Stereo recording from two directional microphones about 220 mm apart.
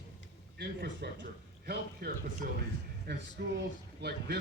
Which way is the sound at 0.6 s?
50° right (ahead or behind).